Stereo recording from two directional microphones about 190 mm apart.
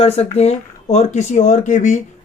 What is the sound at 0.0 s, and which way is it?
Speech, 35° left (ahead or behind).